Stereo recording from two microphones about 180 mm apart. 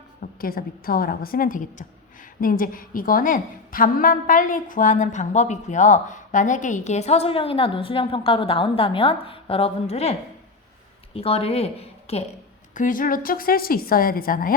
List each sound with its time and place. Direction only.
0.2 s a woman's voice: 55° left (ahead or behind); by 12.2 s 35° left (ahead or behind)
12.7 s a woman's voice: 45° left (ahead or behind)